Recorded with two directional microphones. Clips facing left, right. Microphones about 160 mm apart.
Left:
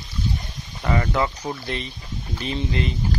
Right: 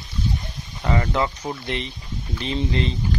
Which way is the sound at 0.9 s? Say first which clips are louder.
Even; 25° right (ahead or behind).